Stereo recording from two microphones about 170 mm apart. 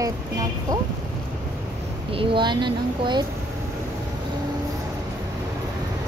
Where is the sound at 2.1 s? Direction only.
30° right (ahead or behind).